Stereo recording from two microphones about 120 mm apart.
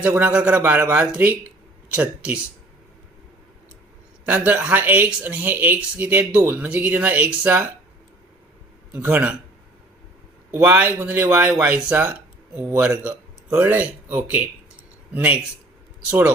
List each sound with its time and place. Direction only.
0.0 s speech: 15° right (ahead or behind)
4.3 s speech: 10° right (ahead or behind)
9.0 s speech: 15° right (ahead or behind)
10.5 s speech: 15° right (ahead or behind)